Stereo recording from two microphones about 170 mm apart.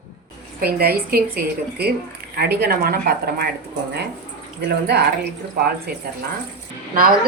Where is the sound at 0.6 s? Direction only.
65° right (ahead or behind).